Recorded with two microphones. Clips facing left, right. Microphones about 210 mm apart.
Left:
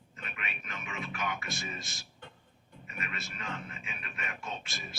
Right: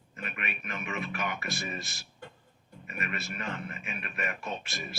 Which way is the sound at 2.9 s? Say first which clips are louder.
Right 5 dB; 65° right (ahead or behind).